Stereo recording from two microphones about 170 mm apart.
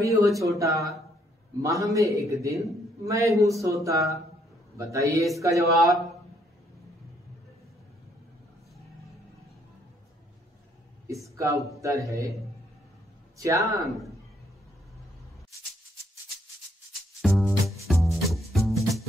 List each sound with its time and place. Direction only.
0.0 s a man's voice: 20° right (ahead or behind)
11.2 s a sound: 20° right (ahead or behind)
11.8 s a man's voice: 20° right (ahead or behind)
13.4 s a man's voice: 20° right (ahead or behind)
13.8 s a man's voice: centre (ahead or behind)
17.2 s music: centre (ahead or behind)